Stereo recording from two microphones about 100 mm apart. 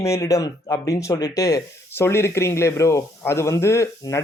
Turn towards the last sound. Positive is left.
turn(degrees=30)  # may be behind; listen again after turning